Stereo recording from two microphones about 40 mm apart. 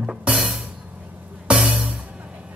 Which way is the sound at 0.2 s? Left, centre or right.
Right.